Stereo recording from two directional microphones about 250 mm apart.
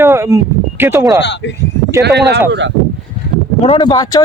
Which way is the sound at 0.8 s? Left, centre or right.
Centre.